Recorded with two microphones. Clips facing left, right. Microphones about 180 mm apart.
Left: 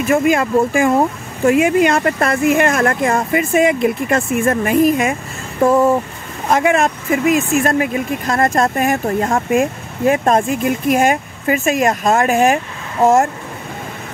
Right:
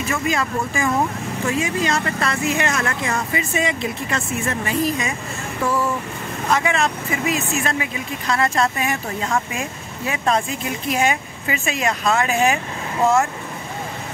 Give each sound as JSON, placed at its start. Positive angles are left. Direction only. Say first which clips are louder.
{"t": 0.0, "sound": "speech", "louder": "left 8 dB", "side_deg": 50}